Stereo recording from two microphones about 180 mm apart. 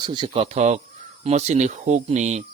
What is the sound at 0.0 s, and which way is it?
Speech, 25° right (ahead or behind).